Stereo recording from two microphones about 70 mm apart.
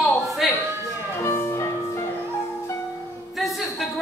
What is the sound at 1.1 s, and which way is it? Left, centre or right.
Music, left.